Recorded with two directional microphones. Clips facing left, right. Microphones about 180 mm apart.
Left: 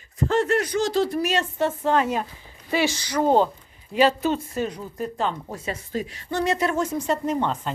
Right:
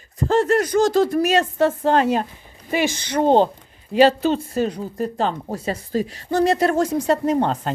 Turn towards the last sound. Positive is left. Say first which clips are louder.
# right 5 dB
turn(degrees=-40)  # may be behind; listen again after turning